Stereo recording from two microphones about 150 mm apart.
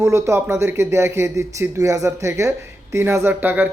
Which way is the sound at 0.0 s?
20° right (ahead or behind).